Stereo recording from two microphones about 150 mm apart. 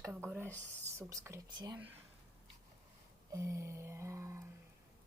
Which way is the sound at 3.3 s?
20° right (ahead or behind).